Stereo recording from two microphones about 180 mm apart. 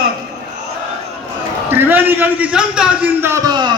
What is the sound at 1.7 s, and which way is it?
A man's voice, 10° right (ahead or behind).